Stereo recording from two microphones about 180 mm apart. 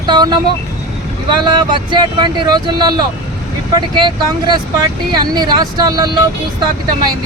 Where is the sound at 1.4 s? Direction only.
25° right (ahead or behind).